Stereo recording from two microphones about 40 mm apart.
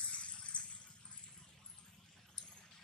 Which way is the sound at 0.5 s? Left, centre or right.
Left.